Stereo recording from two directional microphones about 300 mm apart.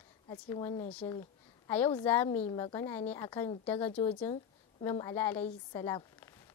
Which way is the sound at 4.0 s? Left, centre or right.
Centre.